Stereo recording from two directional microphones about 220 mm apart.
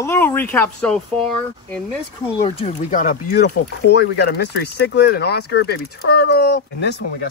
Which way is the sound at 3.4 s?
50° left (ahead or behind).